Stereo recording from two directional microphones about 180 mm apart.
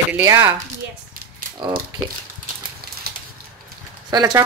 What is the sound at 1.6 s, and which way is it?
Speech, 20° right (ahead or behind).